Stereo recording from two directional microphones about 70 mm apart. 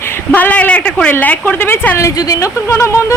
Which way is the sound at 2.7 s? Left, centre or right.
Left.